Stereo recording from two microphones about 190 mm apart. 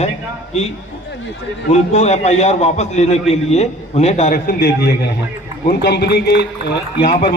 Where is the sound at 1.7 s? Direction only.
35° left (ahead or behind).